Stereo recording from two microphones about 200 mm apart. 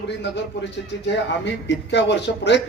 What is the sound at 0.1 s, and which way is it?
A man's voice, 60° left (ahead or behind).